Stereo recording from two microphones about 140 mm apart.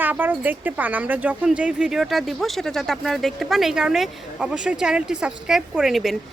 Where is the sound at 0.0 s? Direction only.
10° right (ahead or behind).